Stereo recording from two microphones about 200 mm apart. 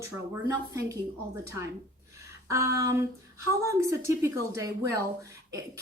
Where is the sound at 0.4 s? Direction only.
15° right (ahead or behind).